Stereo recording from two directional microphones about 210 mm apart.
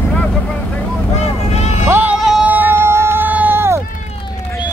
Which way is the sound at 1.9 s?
5° right (ahead or behind).